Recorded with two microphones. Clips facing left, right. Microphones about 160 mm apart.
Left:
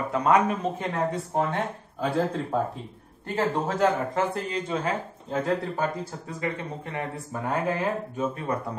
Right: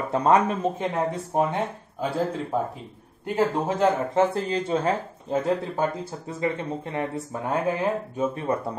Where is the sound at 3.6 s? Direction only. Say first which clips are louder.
Right 1 dB; 20° right (ahead or behind).